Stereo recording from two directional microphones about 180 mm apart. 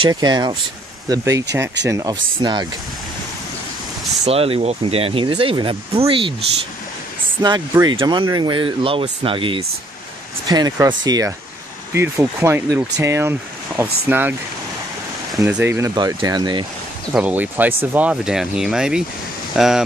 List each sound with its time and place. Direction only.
0.0 s speech: 20° right (ahead or behind)
4.3 s speech: 35° right (ahead or behind)
7.4 s speech: 25° right (ahead or behind)
15.3 s speech: 10° right (ahead or behind)
17.1 s speech: 10° right (ahead or behind)